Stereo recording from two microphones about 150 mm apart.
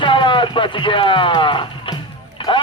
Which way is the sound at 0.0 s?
35° left (ahead or behind).